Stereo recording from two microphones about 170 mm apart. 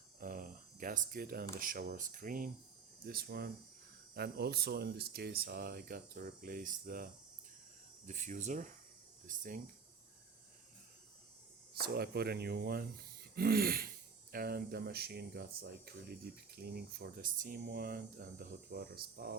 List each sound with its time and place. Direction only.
0.2 s a sound: 60° right (ahead or behind)
1.5 s speech: 55° right (ahead or behind)
8.0 s speech: 45° right (ahead or behind)
11.7 s speech: 65° right (ahead or behind)
16.6 s speech: 70° right (ahead or behind)